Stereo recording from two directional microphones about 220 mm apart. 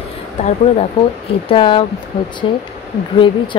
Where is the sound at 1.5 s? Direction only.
25° left (ahead or behind).